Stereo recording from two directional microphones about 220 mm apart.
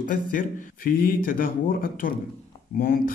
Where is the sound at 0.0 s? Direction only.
35° left (ahead or behind).